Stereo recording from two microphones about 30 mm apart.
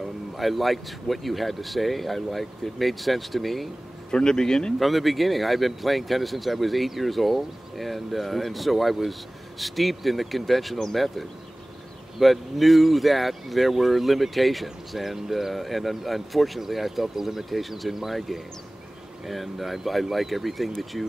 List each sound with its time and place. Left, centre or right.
0.4 s speech: centre
4.1 s speech: left
4.7 s speech: centre